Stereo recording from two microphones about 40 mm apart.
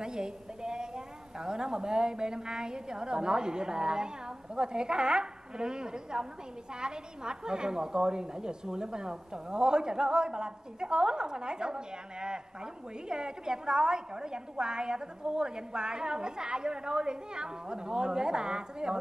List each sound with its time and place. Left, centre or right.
0.0 s a woman's voice: right